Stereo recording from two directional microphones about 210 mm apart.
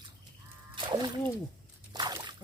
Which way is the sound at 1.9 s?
20° right (ahead or behind).